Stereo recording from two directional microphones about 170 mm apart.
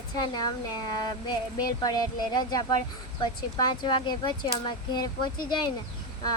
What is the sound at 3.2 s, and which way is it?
Speech, 25° left (ahead or behind).